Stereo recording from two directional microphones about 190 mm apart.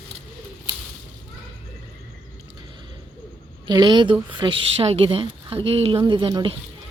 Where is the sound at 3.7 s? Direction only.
25° right (ahead or behind).